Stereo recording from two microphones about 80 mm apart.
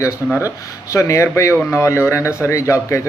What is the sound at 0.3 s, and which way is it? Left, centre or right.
Speech, left.